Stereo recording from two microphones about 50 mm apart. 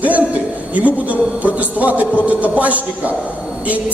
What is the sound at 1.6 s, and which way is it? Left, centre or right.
A man's voice, right.